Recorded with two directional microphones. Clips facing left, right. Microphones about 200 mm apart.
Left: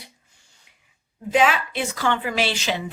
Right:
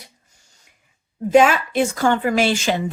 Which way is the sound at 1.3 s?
45° right (ahead or behind).